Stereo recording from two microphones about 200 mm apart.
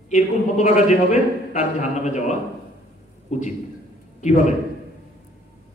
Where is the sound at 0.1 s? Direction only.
35° left (ahead or behind).